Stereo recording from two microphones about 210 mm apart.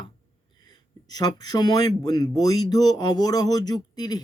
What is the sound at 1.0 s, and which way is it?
Speech, 20° left (ahead or behind).